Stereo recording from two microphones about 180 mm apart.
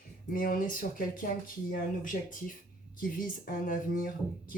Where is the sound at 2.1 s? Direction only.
45° left (ahead or behind).